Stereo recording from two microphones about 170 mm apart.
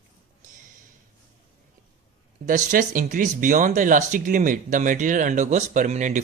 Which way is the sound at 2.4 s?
50° right (ahead or behind).